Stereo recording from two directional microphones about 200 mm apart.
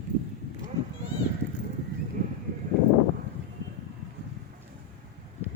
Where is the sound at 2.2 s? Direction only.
50° right (ahead or behind).